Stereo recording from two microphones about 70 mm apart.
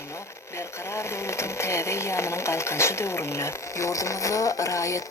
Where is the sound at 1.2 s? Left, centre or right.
Left.